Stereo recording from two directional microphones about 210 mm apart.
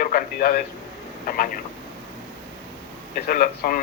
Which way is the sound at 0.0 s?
40° left (ahead or behind).